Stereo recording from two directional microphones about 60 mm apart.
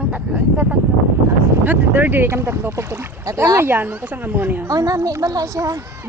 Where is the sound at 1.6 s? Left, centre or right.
Right.